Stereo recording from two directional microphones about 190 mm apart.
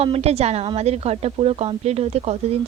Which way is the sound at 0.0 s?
30° right (ahead or behind).